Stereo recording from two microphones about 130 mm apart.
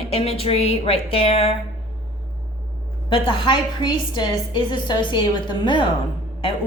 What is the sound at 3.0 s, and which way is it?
A woman's voice, 40° left (ahead or behind).